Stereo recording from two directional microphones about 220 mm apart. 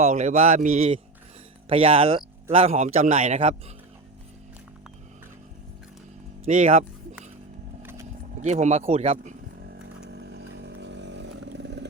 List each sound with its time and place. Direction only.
0.0 s speech: 30° right (ahead or behind)
6.5 s speech: 35° right (ahead or behind)
7.8 s a sound: 10° right (ahead or behind)
8.4 s speech: 30° right (ahead or behind)
9.6 s chainsaw: 45° right (ahead or behind)